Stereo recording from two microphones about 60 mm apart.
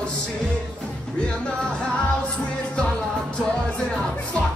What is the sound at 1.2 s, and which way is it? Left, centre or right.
Music, centre.